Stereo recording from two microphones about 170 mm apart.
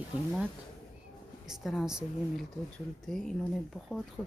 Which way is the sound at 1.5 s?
Centre (ahead or behind).